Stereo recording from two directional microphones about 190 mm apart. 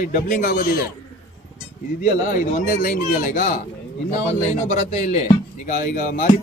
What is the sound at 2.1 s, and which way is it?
A man's voice, 40° left (ahead or behind).